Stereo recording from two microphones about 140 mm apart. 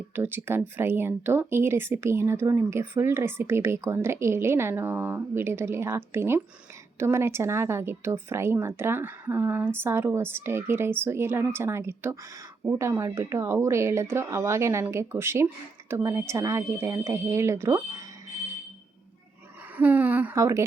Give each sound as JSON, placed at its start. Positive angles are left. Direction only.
{"t": 0.2, "sound": "speech", "side_deg": -15}
{"t": 19.7, "sound": "speech", "side_deg": -10}